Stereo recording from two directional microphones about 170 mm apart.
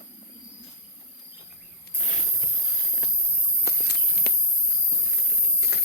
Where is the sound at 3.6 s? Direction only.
75° left (ahead or behind).